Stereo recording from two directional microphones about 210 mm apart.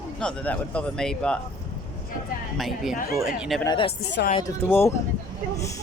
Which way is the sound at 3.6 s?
25° left (ahead or behind).